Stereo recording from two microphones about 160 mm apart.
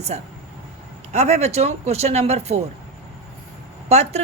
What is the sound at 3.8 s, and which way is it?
Speech, 40° right (ahead or behind).